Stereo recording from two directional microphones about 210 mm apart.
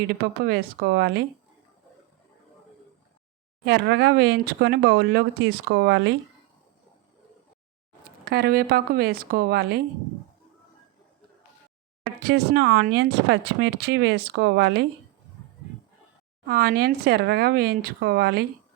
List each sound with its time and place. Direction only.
0.2 s speech: 45° right (ahead or behind)
3.7 s speech: 50° right (ahead or behind)
8.2 s speech: 50° right (ahead or behind)
12.2 s speech: 50° right (ahead or behind)
16.5 s speech: 45° right (ahead or behind)